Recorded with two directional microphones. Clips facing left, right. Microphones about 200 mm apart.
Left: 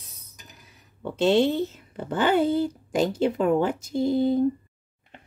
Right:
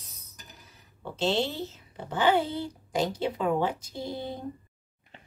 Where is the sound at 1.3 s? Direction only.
55° left (ahead or behind).